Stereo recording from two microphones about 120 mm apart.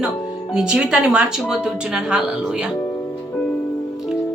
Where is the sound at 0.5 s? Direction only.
5° right (ahead or behind).